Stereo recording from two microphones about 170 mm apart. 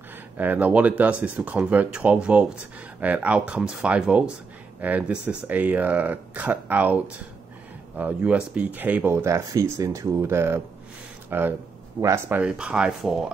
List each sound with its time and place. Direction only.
0.4 s speech: 10° right (ahead or behind)
8.0 s speech: 5° right (ahead or behind)